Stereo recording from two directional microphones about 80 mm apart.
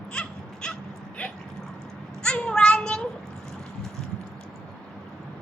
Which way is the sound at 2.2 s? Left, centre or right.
Centre.